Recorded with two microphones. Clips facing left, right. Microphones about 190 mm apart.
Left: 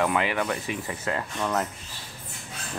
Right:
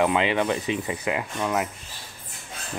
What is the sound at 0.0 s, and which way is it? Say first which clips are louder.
Speech: right 3 dB; 20° right (ahead or behind).